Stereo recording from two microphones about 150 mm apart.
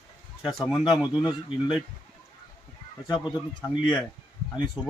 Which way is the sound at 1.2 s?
35° left (ahead or behind).